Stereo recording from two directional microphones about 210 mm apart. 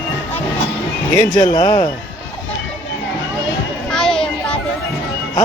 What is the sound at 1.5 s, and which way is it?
Speech, 20° left (ahead or behind).